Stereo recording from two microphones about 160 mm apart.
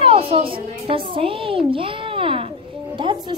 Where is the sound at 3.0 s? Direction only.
30° right (ahead or behind).